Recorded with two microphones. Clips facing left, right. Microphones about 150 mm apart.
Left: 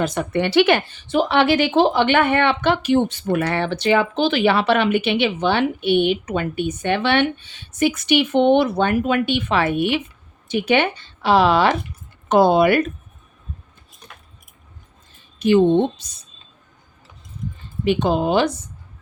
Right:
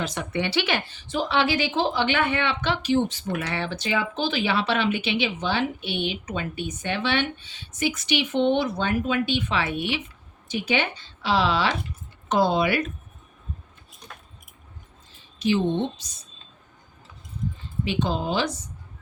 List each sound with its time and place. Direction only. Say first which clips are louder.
0.0 s a woman's voice: left 7 dB; 50° left (ahead or behind)
15.1 s speech: left 8 dB; 55° left (ahead or behind)
17.8 s a woman's voice: left 8 dB; 60° left (ahead or behind)